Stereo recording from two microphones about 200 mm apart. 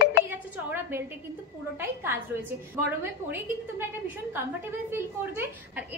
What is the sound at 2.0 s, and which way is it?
Speech, 10° right (ahead or behind).